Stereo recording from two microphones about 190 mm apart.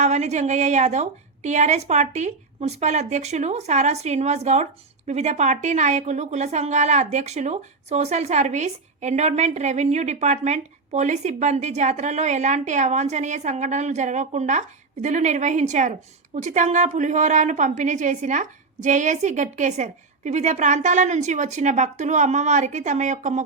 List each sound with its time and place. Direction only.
0.0 s a woman's voice: 35° right (ahead or behind)